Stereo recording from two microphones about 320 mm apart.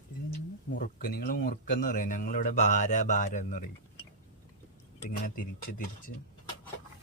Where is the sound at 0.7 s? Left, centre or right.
Left.